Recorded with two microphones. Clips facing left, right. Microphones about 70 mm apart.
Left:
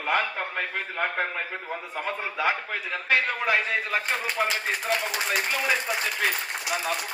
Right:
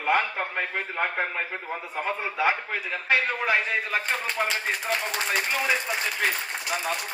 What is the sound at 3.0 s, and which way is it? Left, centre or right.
Speech, right.